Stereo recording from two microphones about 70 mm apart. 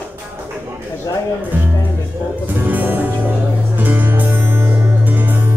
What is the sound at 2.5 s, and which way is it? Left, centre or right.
Music, right.